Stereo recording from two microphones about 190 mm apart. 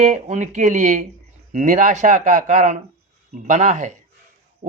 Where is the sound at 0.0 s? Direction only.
40° right (ahead or behind).